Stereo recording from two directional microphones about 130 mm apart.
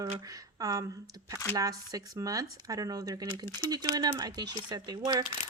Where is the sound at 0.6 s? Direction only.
30° right (ahead or behind).